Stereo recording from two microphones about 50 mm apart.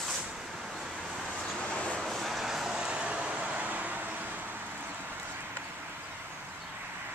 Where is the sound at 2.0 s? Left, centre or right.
Centre.